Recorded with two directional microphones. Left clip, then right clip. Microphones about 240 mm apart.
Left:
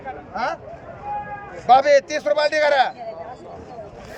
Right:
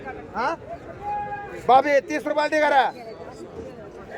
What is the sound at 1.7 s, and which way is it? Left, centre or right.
Speech, centre.